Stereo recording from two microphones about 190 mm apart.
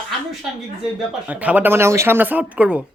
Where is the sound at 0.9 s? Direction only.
5° right (ahead or behind).